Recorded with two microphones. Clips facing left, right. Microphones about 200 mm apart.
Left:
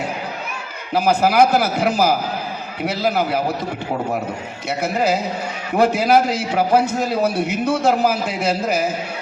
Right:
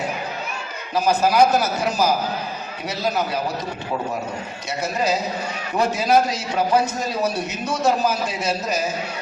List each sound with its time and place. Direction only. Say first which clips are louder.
0.9 s a man's voice: left 2 dB; 60° left (ahead or behind)
4.8 s a man's voice: left 3 dB; 60° left (ahead or behind)